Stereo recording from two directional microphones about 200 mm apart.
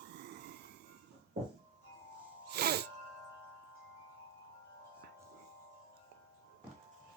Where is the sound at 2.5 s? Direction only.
50° right (ahead or behind).